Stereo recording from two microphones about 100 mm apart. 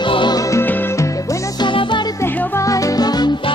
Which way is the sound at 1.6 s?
50° left (ahead or behind).